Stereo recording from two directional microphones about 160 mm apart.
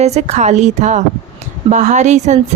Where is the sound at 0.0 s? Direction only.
45° right (ahead or behind).